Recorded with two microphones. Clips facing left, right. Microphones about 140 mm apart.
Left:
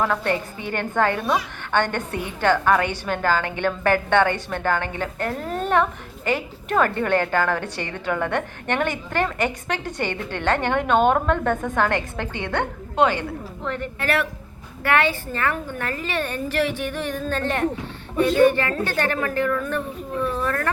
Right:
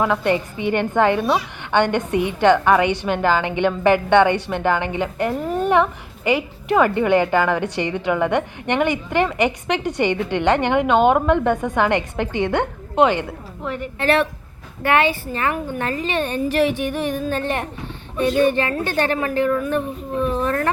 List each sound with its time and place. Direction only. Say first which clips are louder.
0.0 s a woman's voice: right 4 dB; 15° right (ahead or behind)
13.7 s a woman's voice: right 1 dB; 5° right (ahead or behind)
14.0 s a woman's voice: right 7 dB; 25° right (ahead or behind)